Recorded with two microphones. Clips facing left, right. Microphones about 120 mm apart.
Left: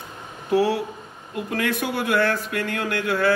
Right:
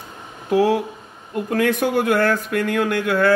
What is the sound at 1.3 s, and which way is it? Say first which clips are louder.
Speech: right 6 dB; 45° right (ahead or behind).